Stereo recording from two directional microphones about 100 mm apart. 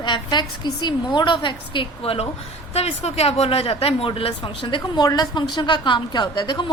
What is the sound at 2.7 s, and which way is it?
Speech, 90° left.